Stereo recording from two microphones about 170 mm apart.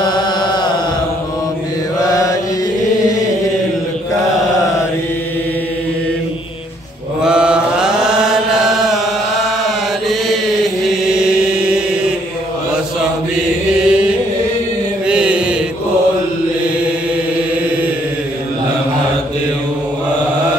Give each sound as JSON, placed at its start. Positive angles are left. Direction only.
{"t": 0.0, "sound": "chant", "side_deg": 25}
{"t": 7.2, "sound": "chant", "side_deg": -5}
{"t": 10.0, "sound": "chant", "side_deg": 0}
{"t": 13.7, "sound": "chant", "side_deg": -5}
{"t": 15.0, "sound": "mantra", "side_deg": -5}